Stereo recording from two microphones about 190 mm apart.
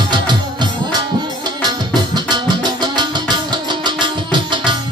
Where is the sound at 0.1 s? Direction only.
25° right (ahead or behind).